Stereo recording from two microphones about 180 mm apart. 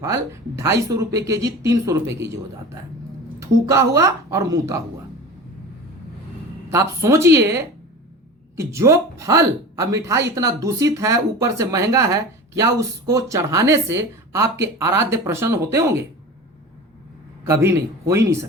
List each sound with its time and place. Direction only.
0.0 s speech: 15° right (ahead or behind)
6.7 s speech: 15° right (ahead or behind)
17.4 s speech: 15° right (ahead or behind)